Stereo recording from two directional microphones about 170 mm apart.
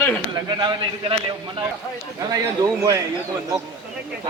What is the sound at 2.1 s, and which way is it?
Speech, 20° right (ahead or behind).